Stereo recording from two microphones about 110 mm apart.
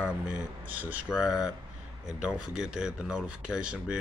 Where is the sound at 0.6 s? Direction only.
15° right (ahead or behind).